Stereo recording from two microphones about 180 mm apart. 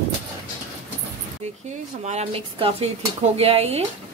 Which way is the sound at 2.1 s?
35° right (ahead or behind).